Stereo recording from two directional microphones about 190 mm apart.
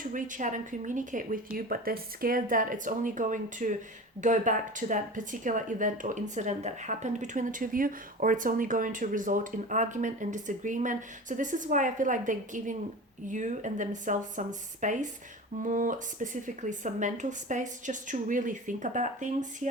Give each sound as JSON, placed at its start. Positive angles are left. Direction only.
{"t": 0.0, "sound": "speech", "side_deg": -45}